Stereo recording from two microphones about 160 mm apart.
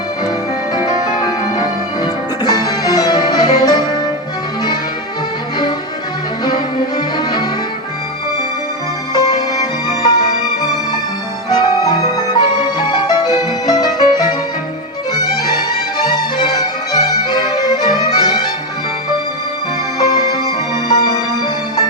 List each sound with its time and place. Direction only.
2.0 s music: 25° left (ahead or behind)
6.4 s music: 25° left (ahead or behind)
9.1 s music: 25° left (ahead or behind)
20.0 s music: 25° left (ahead or behind)